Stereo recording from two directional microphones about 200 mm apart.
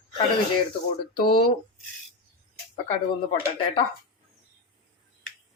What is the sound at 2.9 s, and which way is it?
Speech, 25° left (ahead or behind).